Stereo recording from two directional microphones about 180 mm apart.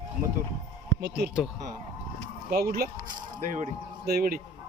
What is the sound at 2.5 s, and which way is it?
Speech, 60° right (ahead or behind).